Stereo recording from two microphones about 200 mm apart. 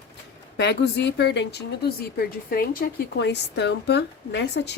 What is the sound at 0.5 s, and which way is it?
A woman's voice, 60° left (ahead or behind).